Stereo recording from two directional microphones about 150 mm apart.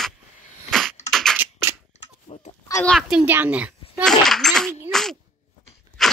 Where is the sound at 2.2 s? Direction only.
45° left (ahead or behind).